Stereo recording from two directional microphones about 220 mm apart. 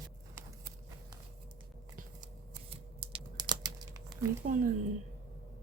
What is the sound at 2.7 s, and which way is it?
Computer keyboard, 25° right (ahead or behind).